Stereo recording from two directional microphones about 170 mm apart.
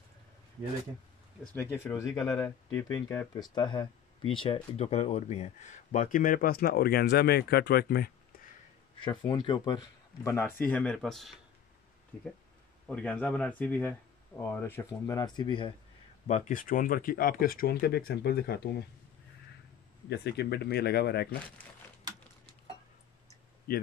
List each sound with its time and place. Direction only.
1.4 s speech: 15° left (ahead or behind); by 8.1 s 65° left (ahead or behind)
9.0 s speech: 25° left (ahead or behind)
10.2 s speech: 15° left (ahead or behind)
12.8 s speech: 5° left (ahead or behind); by 15.7 s 25° left (ahead or behind)
16.3 s speech: 45° left (ahead or behind); by 18.6 s 70° left (ahead or behind)
20.1 s speech: 75° left (ahead or behind)